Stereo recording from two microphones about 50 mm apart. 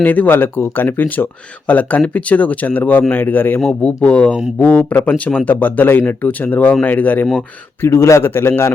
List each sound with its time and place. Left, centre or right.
0.0 s speech: left
3.7 s speech: left
7.8 s a man's voice: left